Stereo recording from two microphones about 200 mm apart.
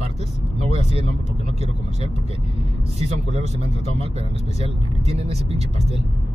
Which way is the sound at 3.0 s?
30° right (ahead or behind).